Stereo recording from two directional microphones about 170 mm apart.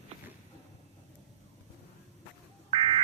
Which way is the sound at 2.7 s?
35° right (ahead or behind).